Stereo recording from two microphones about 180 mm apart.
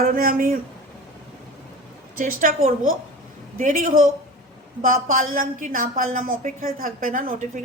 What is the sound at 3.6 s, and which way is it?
A woman's voice, 45° right (ahead or behind).